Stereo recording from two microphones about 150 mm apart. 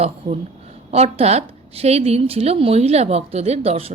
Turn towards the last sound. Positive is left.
turn(degrees=-40)  # may be behind; listen again after turning